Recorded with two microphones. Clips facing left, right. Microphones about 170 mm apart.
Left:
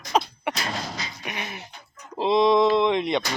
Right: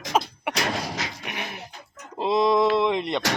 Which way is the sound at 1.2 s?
Centre (ahead or behind).